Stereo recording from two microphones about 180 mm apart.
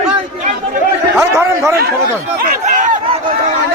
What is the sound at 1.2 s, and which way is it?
Chatter, 15° right (ahead or behind).